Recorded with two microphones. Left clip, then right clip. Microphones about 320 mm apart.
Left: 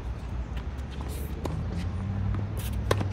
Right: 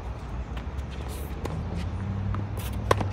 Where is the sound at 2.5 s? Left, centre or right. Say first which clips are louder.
Right 5 dB; centre.